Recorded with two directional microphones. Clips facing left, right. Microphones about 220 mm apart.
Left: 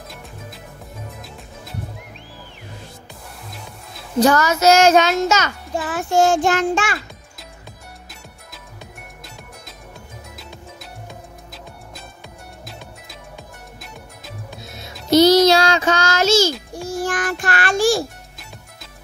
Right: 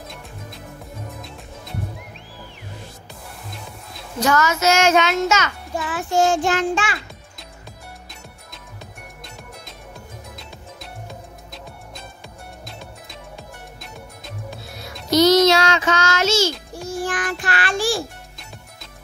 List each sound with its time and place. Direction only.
3.4 s music: centre (ahead or behind)
4.2 s a child's voice: 35° left (ahead or behind)
10.3 s music: centre (ahead or behind)
14.6 s music: 25° left (ahead or behind)
16.8 s child singing: 40° left (ahead or behind)